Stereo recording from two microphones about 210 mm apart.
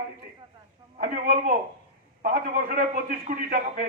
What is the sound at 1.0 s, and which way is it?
A man's voice, 45° right (ahead or behind).